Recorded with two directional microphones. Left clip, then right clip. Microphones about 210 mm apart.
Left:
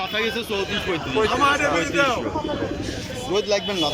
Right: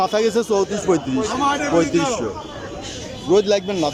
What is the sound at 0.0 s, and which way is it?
Speech, 25° right (ahead or behind).